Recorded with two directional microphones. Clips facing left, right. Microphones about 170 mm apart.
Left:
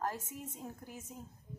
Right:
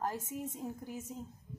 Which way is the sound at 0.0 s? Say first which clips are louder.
Right 2 dB; 15° right (ahead or behind).